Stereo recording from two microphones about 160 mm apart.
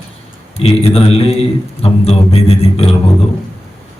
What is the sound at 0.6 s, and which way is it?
Speech, 40° left (ahead or behind).